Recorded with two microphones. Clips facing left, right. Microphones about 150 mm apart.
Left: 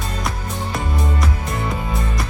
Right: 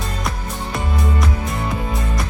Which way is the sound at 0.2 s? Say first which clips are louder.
Even; centre (ahead or behind).